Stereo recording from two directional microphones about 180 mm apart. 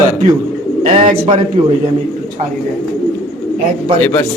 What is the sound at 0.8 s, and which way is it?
Speech, 35° right (ahead or behind).